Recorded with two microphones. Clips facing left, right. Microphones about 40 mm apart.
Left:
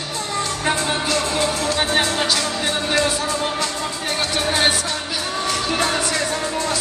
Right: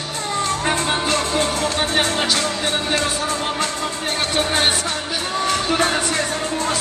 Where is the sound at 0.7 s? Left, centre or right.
Right.